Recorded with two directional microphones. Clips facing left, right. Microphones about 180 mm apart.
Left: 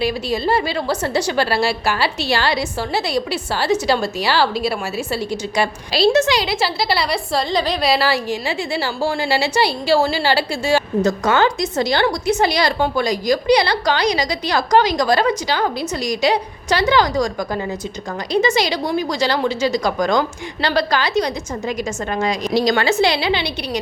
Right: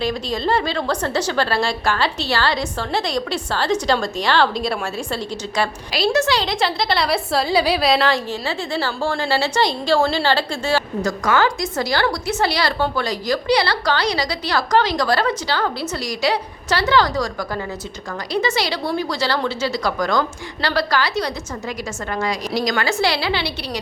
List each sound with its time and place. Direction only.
0.0 s a woman's voice: 10° left (ahead or behind)
5.9 s a woman's voice: 30° left (ahead or behind)
6.2 s a woman's voice: 10° left (ahead or behind)
11.0 s a woman's voice: 25° left (ahead or behind)